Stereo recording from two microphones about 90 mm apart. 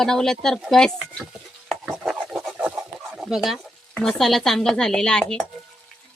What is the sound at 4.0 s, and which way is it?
Speech, 5° left (ahead or behind).